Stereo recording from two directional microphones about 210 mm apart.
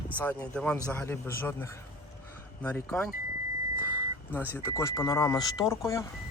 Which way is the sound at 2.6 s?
10° left (ahead or behind).